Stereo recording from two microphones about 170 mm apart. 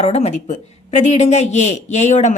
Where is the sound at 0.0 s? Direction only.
40° left (ahead or behind).